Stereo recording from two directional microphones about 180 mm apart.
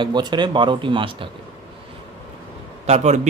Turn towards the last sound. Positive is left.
turn(degrees=-40)  # may be behind; listen again after turning